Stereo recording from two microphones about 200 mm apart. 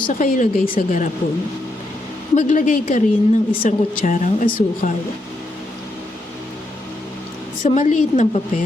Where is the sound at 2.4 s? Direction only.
40° left (ahead or behind).